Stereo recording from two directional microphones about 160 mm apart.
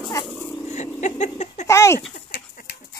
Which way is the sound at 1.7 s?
15° left (ahead or behind).